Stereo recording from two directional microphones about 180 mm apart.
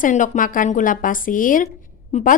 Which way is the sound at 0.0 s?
45° left (ahead or behind).